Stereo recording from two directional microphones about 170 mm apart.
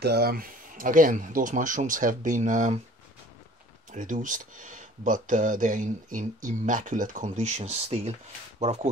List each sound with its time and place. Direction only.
0.0 s speech: 70° right (ahead or behind); by 2.8 s 50° right (ahead or behind)
3.9 s speech: 50° right (ahead or behind)